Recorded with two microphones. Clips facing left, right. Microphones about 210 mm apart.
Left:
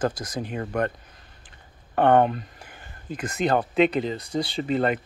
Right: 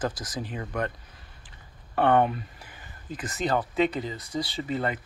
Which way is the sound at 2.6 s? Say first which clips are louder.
Left 3 dB; 55° left (ahead or behind).